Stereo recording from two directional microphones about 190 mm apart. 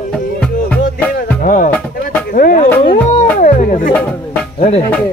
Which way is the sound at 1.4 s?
45° left (ahead or behind).